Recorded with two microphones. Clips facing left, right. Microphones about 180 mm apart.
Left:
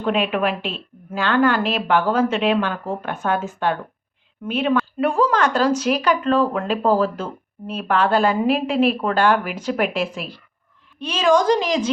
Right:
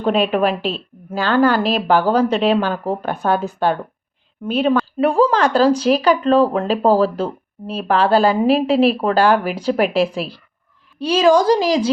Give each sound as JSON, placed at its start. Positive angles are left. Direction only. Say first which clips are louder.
{"t": 0.0, "sound": "a woman's voice", "louder": "right 4 dB", "side_deg": -35}